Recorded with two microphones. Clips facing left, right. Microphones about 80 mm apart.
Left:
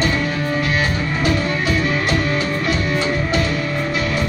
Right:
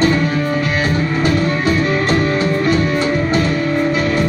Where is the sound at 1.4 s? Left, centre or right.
Right.